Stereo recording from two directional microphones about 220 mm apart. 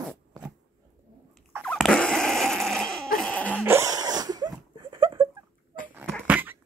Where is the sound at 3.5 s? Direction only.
10° right (ahead or behind).